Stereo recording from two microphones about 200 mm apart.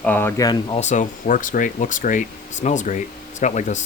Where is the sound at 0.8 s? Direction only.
35° left (ahead or behind).